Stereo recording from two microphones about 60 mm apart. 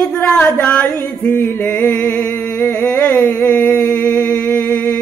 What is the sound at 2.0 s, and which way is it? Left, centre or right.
Humming, centre.